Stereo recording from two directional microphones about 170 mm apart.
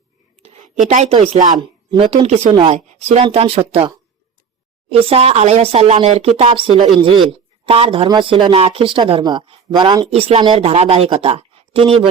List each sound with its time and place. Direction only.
0.4 s a woman's voice: 40° right (ahead or behind); by 2.2 s 25° right (ahead or behind)
2.2 s speech: 40° right (ahead or behind)